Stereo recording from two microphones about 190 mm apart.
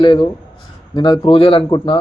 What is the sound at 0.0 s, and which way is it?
Speech, 25° left (ahead or behind).